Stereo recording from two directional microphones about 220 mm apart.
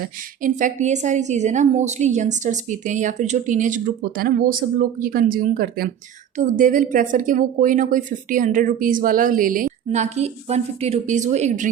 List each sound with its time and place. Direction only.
0.4 s speech: 35° right (ahead or behind)